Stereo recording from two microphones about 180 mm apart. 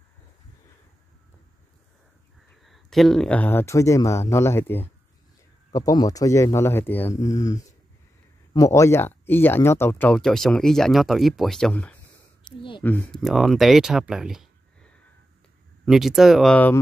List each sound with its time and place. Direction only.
2.6 s speech: centre (ahead or behind)